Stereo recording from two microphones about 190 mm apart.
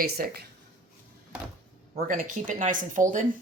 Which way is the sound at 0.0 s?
55° right (ahead or behind).